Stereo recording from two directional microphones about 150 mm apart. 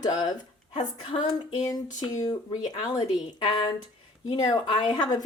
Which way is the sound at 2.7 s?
25° left (ahead or behind).